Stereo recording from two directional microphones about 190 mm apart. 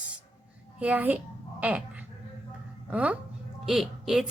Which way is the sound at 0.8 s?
10° right (ahead or behind).